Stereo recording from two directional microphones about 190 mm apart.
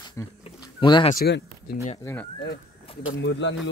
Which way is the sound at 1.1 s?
55° left (ahead or behind).